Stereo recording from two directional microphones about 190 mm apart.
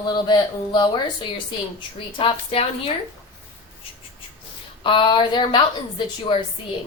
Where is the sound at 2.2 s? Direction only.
30° left (ahead or behind).